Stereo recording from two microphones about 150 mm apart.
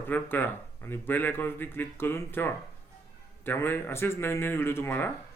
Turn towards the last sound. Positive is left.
turn(degrees=15)  # may be behind; listen again after turning